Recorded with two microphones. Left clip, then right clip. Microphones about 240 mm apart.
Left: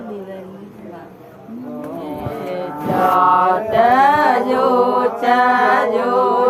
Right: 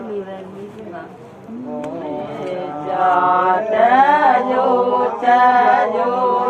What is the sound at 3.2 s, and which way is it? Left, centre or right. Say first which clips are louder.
Chant: left 1 dB; left.